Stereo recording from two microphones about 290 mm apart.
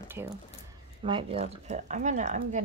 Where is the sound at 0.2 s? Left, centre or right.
Centre.